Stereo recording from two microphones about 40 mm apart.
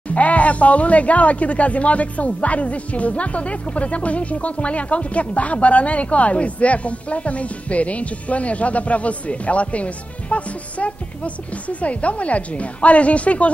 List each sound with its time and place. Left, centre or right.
0.1 s speech: left